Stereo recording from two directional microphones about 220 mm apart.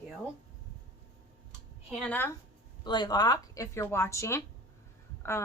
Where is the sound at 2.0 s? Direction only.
5° left (ahead or behind).